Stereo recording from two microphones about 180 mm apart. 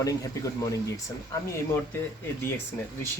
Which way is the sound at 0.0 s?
20° left (ahead or behind).